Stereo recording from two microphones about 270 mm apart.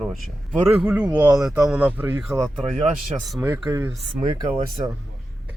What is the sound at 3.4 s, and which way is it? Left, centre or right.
Speech, centre.